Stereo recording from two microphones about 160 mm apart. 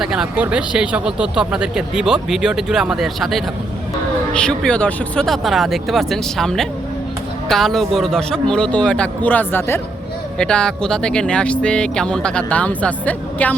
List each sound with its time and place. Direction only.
0.0 s speech: 5° right (ahead or behind)